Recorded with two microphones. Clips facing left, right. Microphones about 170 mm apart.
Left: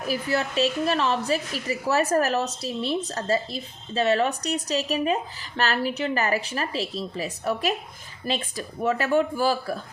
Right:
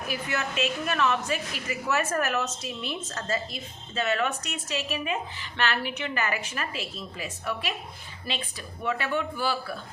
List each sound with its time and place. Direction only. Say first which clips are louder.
0.1 s a woman's voice: left 6 dB; 35° left (ahead or behind)